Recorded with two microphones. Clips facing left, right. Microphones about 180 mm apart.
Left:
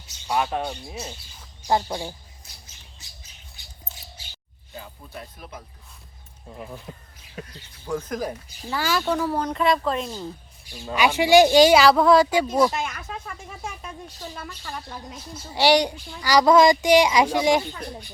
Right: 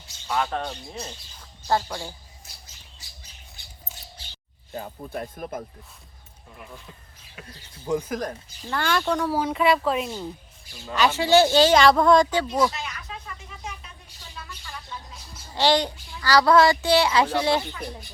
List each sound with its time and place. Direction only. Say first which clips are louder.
0.3 s a child's voice: left 2 dB; 15° left (ahead or behind)
1.6 s a child's voice: left 2 dB; 15° left (ahead or behind)
4.7 s speech: right 6 dB; 50° right (ahead or behind)
6.5 s speech: left 6 dB; 30° left (ahead or behind)
7.4 s speech: right 9 dB; 20° right (ahead or behind)
8.2 s speech: left 2 dB; 5° left (ahead or behind)
10.8 s a child's voice: left 2 dB; 15° left (ahead or behind)
12.7 s a sound: left 6 dB; 50° left (ahead or behind)
14.3 s speech: left 1 dB; 50° left (ahead or behind)
15.5 s a child's voice: left 3 dB; 15° left (ahead or behind)